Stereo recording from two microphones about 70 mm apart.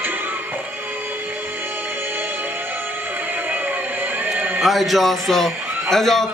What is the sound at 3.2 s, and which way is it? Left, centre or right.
Music, right.